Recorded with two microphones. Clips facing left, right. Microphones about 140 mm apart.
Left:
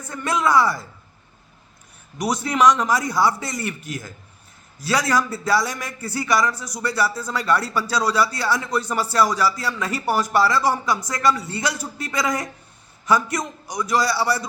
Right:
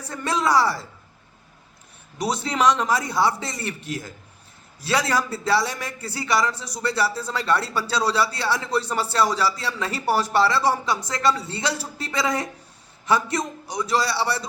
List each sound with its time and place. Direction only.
0.0 s a man's voice: 30° right (ahead or behind)
2.1 s a man's voice: 30° right (ahead or behind)